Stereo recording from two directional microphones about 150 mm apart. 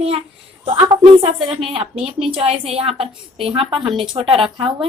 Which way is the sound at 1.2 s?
40° right (ahead or behind).